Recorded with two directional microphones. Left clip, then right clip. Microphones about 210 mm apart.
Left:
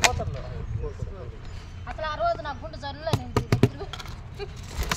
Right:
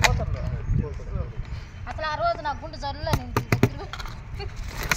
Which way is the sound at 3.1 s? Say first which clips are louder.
Even; 15° right (ahead or behind).